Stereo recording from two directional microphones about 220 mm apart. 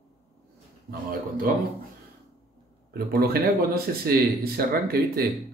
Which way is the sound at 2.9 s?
45° right (ahead or behind).